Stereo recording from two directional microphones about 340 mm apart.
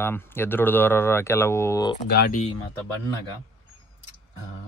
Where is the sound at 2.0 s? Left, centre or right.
Left.